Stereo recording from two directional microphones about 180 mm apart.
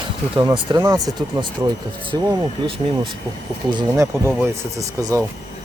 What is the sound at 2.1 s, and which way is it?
Speech, 30° right (ahead or behind).